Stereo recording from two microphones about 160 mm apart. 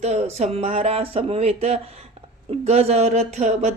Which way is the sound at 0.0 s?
40° right (ahead or behind).